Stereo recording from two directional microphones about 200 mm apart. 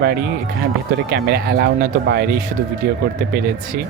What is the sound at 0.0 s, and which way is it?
Speech, 50° right (ahead or behind).